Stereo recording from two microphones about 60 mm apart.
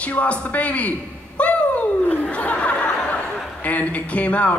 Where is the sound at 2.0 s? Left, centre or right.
Left.